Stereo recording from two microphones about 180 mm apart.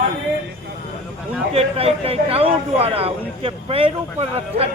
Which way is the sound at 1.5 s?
35° right (ahead or behind).